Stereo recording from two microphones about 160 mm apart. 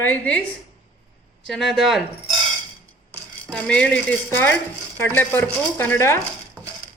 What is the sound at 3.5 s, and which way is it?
Speech, 5° left (ahead or behind).